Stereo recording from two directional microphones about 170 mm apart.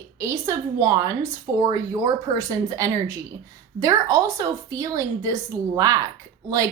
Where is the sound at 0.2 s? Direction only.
15° right (ahead or behind).